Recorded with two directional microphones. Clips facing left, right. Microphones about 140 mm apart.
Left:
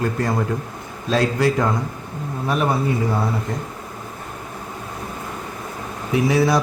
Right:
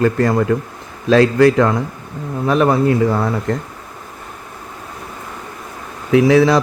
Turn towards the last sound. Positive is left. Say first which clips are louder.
# right 7 dB
turn(degrees=-90)